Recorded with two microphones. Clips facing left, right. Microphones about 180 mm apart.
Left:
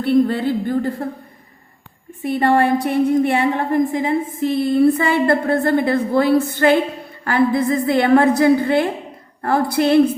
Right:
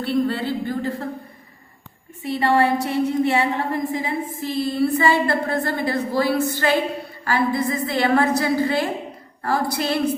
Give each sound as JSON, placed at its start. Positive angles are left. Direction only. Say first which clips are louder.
{"t": 0.0, "sound": "a woman's voice", "louder": "left 6 dB", "side_deg": 50}
{"t": 2.2, "sound": "a woman's voice", "louder": "left 3 dB", "side_deg": 50}
{"t": 6.5, "sound": "a sound", "louder": "left 5 dB", "side_deg": 55}